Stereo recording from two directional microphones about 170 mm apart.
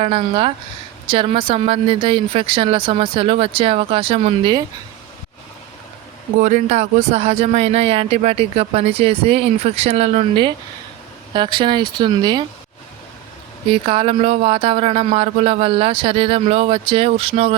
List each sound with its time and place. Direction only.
0.0 s speech: 35° right (ahead or behind)
6.4 s speech: 45° right (ahead or behind); by 12.4 s 25° right (ahead or behind)
13.7 s speech: 30° right (ahead or behind)